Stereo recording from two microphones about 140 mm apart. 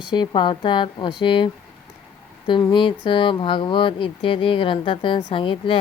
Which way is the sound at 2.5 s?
35° left (ahead or behind).